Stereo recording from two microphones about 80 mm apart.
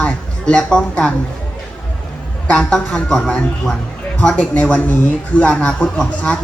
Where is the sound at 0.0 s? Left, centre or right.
Centre.